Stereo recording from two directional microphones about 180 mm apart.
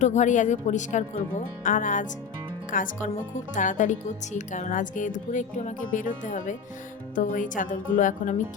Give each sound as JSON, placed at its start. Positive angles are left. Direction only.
{"t": 0.0, "sound": "speech", "side_deg": 40}